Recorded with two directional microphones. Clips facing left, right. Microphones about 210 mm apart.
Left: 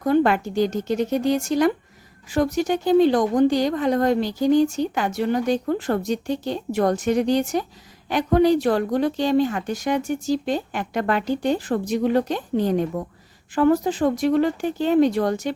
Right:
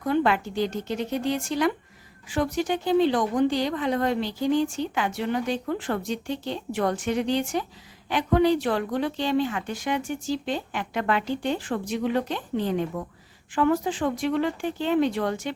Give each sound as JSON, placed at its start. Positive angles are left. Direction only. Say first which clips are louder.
{"t": 0.0, "sound": "a woman's voice", "louder": "left 5 dB", "side_deg": 45}